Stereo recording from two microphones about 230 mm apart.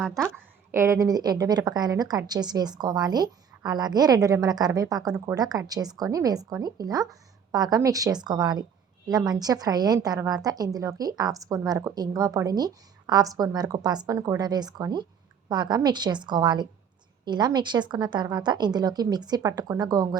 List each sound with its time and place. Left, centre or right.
0.7 s a woman's voice: centre